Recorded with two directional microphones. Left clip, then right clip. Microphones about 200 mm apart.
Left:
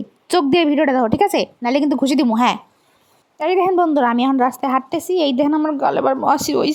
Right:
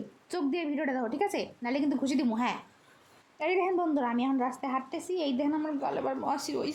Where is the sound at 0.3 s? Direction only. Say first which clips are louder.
Left 17 dB; 45° left (ahead or behind).